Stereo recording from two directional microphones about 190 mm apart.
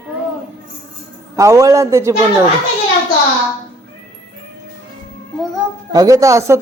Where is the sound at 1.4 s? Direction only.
15° right (ahead or behind).